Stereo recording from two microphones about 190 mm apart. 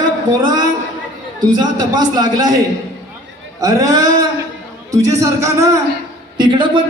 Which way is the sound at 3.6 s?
15° right (ahead or behind).